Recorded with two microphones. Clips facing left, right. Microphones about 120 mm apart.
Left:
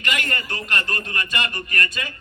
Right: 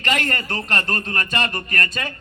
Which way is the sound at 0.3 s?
45° right (ahead or behind).